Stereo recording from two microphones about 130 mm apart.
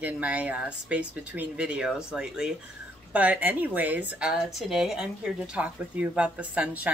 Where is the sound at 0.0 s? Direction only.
10° right (ahead or behind).